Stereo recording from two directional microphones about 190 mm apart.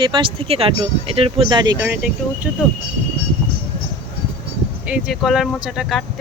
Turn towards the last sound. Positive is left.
turn(degrees=0)  # may be behind; listen again after turning